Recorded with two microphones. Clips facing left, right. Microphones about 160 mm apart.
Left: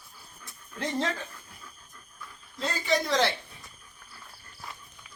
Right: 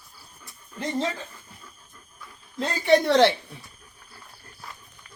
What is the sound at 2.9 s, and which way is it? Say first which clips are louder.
Speech: right 9 dB; 70° right (ahead or behind).